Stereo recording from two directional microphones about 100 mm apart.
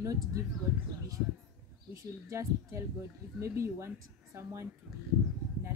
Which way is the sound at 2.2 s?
30° right (ahead or behind).